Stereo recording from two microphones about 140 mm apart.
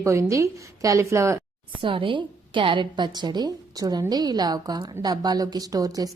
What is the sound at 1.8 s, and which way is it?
A woman's voice, 40° right (ahead or behind).